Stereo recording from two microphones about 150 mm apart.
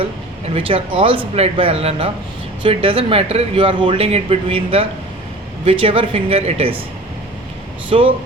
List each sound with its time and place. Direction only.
0.4 s a man's voice: 35° right (ahead or behind)
7.9 s a man's voice: 35° right (ahead or behind)